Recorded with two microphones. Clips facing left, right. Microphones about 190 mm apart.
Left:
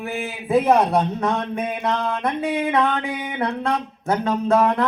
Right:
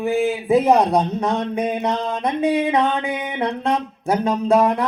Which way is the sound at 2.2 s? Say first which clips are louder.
Right 4 dB; 20° right (ahead or behind).